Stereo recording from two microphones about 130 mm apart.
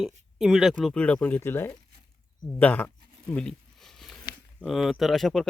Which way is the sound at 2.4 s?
10° left (ahead or behind).